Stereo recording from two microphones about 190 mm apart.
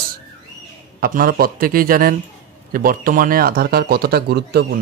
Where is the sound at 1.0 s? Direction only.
50° right (ahead or behind).